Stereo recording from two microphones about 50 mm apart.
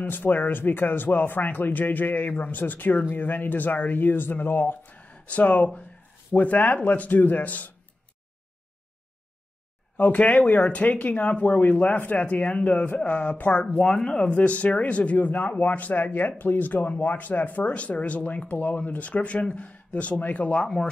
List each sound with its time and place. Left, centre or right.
0.0 s speech: left
9.9 s speech: left
13.7 s speech: centre
14.3 s speech: left
20.6 s speech: centre